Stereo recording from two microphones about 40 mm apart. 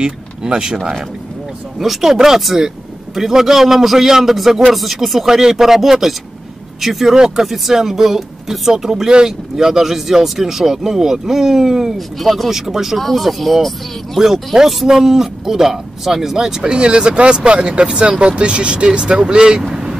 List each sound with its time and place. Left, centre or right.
0.0 s speech: right
1.8 s speech: centre
16.6 s speech: right
19.7 s vehicle: centre